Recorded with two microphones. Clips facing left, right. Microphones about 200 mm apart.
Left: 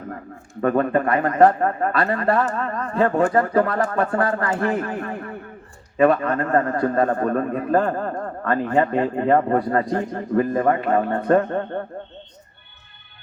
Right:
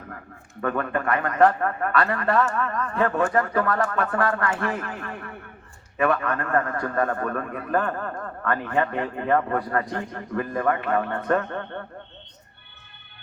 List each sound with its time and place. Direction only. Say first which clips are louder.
0.6 s a man's voice: left 7 dB; 25° left (ahead or behind)